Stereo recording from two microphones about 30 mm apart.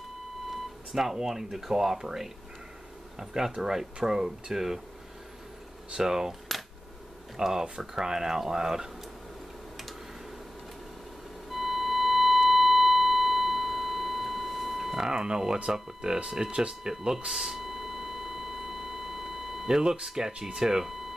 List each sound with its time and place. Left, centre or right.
0.9 s speech: centre
5.9 s speech: centre
7.3 s speech: centre
11.5 s music: centre
15.0 s speech: right
16.5 s speech: right
16.9 s speech: centre
17.3 s a sound: centre
19.8 s speech: right